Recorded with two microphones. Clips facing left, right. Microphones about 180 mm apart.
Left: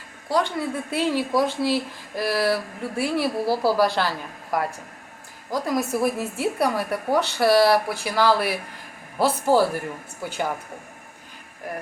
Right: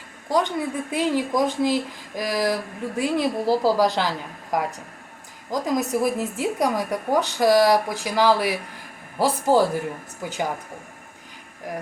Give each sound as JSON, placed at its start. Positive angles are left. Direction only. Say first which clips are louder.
{"t": 0.3, "sound": "speech", "louder": "right 1 dB", "side_deg": -15}
{"t": 5.5, "sound": "speech", "louder": "right 1 dB", "side_deg": -15}